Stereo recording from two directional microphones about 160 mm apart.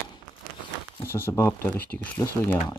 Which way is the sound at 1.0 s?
15° left (ahead or behind).